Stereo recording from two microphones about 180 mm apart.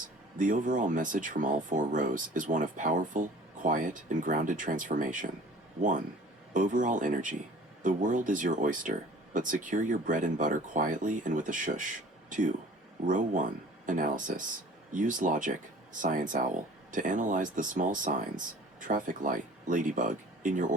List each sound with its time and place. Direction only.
0.3 s speech: 45° right (ahead or behind)
6.5 s speech: 45° right (ahead or behind)